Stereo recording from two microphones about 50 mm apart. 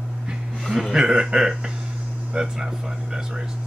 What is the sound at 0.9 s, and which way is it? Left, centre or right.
Speech, centre.